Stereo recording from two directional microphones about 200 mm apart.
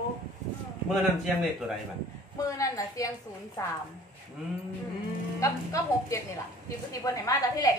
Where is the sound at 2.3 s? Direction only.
15° left (ahead or behind).